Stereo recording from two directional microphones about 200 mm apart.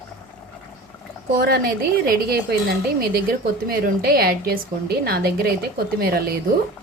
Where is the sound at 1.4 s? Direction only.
50° right (ahead or behind).